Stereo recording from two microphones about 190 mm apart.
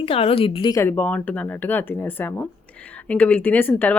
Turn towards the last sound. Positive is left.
turn(degrees=10)  # may be behind; listen again after turning